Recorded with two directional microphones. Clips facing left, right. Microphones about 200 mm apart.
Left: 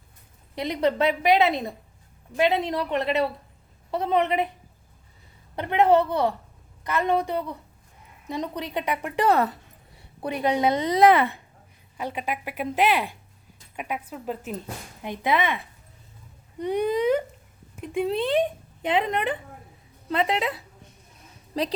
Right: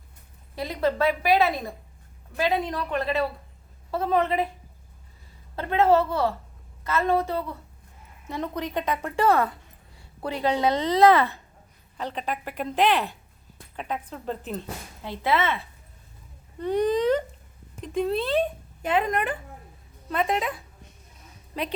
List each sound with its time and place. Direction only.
0.5 s a woman's voice: 20° left (ahead or behind)
5.5 s a woman's voice: 20° left (ahead or behind)